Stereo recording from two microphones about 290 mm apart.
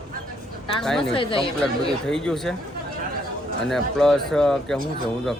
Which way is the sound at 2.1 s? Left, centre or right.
Centre.